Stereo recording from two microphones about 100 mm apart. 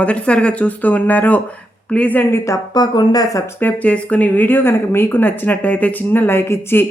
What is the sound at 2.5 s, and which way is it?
Speech, 45° left (ahead or behind).